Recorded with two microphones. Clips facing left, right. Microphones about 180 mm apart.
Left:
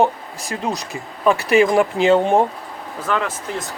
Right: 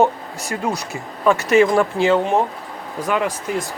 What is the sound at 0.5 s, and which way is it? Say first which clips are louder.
Speech: right 1 dB; 20° left (ahead or behind).